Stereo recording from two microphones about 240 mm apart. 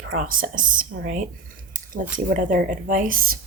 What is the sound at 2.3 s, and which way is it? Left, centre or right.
Speech, right.